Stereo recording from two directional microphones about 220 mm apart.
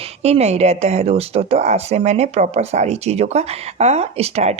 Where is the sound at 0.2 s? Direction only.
30° right (ahead or behind).